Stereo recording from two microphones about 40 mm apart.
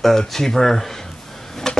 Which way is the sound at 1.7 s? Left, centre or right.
Centre.